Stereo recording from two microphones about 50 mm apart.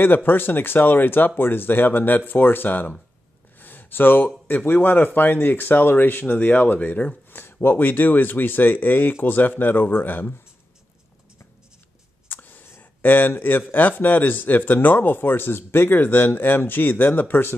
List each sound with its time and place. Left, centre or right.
0.0 s speech: left
3.5 s a sound: left
4.5 s speech: left
7.2 s speech: left
12.3 s a sound: left
13.0 s speech: left